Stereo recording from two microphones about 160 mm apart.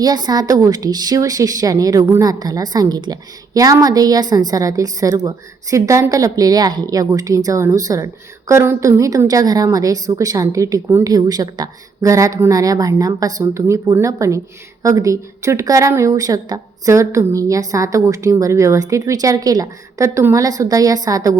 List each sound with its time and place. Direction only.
0.0 s a woman's voice: 25° right (ahead or behind)